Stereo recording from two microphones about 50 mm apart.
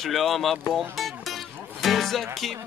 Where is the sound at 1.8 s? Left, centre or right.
Centre.